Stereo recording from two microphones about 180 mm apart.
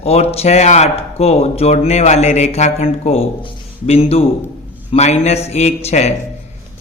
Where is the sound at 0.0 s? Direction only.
35° left (ahead or behind).